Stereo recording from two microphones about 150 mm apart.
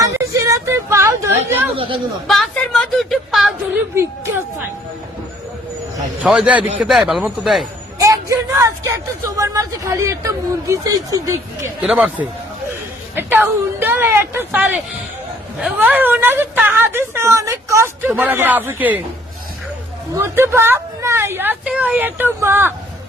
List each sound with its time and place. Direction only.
0.0 s a sound: 20° right (ahead or behind)
1.5 s speech: 15° right (ahead or behind)
1.7 s speech: 35° right (ahead or behind)
2.2 s a man's voice: centre (ahead or behind)
6.2 s a man's voice: 5° right (ahead or behind)
7.9 s speech: 20° right (ahead or behind)
11.8 s a woman's voice: 5° right (ahead or behind)
15.8 s a woman's voice: 10° right (ahead or behind)
20.1 s a woman's voice: 15° right (ahead or behind)